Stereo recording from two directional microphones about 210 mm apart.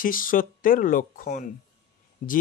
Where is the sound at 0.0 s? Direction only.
40° left (ahead or behind).